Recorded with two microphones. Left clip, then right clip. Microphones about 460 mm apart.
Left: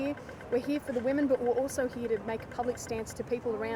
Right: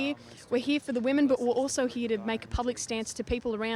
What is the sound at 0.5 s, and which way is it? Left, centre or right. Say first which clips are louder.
Speech: right 2 dB; right.